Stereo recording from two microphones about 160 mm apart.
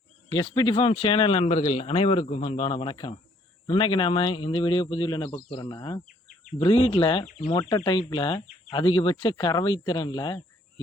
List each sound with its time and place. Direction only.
0.3 s speech: 30° left (ahead or behind)